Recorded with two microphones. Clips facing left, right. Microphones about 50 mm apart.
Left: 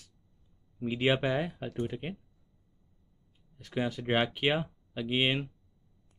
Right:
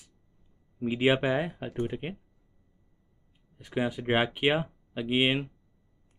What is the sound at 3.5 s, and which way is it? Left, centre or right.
Speech, centre.